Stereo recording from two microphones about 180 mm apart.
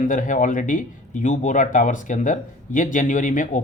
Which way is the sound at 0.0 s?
45° left (ahead or behind).